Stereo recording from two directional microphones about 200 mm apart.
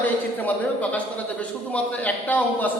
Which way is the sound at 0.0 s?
10° left (ahead or behind).